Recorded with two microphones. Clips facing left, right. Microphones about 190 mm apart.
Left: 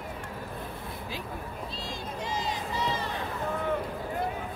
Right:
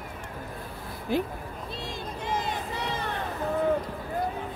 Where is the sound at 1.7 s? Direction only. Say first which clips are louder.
Right 2 dB; 55° right (ahead or behind).